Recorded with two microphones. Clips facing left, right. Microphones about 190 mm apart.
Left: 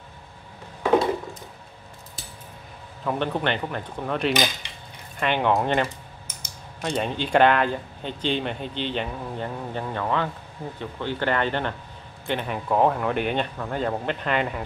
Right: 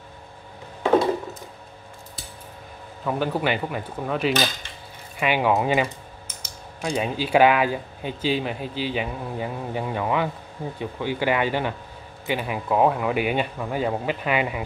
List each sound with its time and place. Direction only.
3.1 s speech: 5° right (ahead or behind)
4.3 s cutlery: 15° left (ahead or behind)
5.2 s speech: 5° right (ahead or behind)